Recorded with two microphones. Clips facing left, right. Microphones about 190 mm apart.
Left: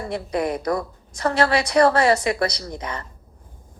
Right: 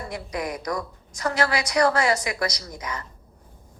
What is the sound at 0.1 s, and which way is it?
A woman's voice, 30° left (ahead or behind).